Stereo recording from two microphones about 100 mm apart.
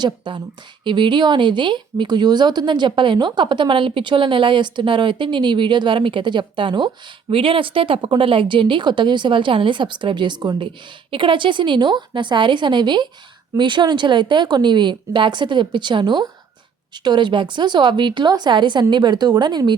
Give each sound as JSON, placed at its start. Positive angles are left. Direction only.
{"t": 0.0, "sound": "speech", "side_deg": -50}
{"t": 11.1, "sound": "speech", "side_deg": -55}